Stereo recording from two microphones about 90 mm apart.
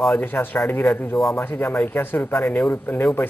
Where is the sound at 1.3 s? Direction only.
25° left (ahead or behind).